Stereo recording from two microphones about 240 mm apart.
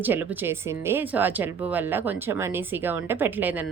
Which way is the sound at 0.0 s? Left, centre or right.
Centre.